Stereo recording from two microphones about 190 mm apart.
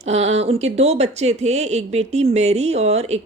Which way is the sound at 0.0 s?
35° right (ahead or behind).